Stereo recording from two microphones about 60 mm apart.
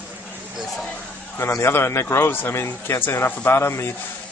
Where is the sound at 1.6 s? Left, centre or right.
Left.